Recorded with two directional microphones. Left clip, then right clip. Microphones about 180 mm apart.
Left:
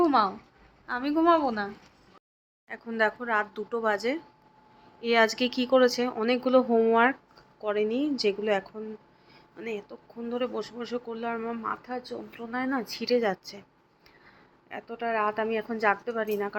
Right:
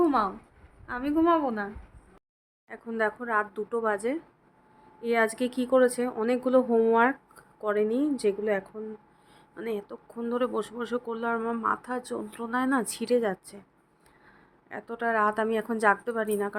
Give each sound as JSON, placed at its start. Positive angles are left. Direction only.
{"t": 0.0, "sound": "a sound", "side_deg": -10}
{"t": 0.9, "sound": "a man's voice", "side_deg": -10}
{"t": 8.3, "sound": "a woman's voice", "side_deg": 0}
{"t": 9.3, "sound": "a man's voice", "side_deg": -25}
{"t": 13.0, "sound": "a man's voice", "side_deg": -20}
{"t": 14.8, "sound": "a man's voice", "side_deg": -30}